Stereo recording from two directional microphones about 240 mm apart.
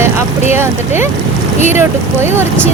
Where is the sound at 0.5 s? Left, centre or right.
Centre.